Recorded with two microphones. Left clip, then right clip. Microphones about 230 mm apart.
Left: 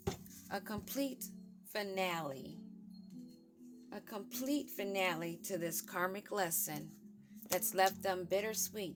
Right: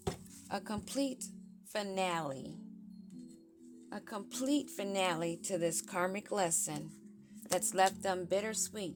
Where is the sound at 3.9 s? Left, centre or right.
Centre.